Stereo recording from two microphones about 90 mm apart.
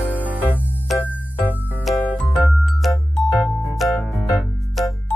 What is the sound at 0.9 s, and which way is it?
Music, centre (ahead or behind).